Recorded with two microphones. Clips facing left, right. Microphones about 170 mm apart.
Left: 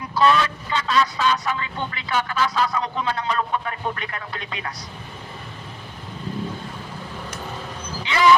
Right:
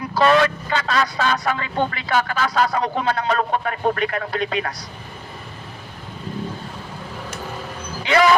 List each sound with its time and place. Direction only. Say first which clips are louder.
0.1 s speech: right 3 dB; 50° right (ahead or behind)
1.7 s speech: right 5 dB; 35° right (ahead or behind)
2.6 s speech: right 4 dB; 35° right (ahead or behind)
8.0 s speech: right 1 dB; 50° right (ahead or behind)